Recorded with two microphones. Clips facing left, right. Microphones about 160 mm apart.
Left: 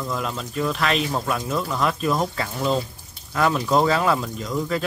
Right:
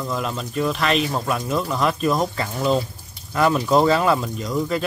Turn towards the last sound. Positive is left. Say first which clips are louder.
# right 2 dB
turn(degrees=0)  # may be behind; listen again after turning